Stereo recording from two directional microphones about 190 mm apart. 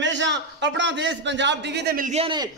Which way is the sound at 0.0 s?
70° right (ahead or behind).